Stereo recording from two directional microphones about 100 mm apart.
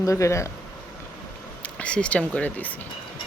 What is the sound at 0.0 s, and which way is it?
Speech, 30° left (ahead or behind).